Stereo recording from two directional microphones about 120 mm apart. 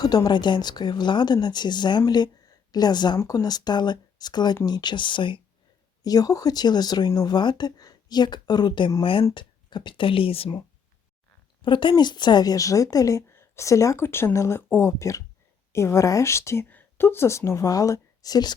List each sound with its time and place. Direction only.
0.0 s speech: 35° left (ahead or behind)
6.0 s speech: 30° left (ahead or behind); by 10.6 s 50° left (ahead or behind)
11.6 s speech: 40° left (ahead or behind)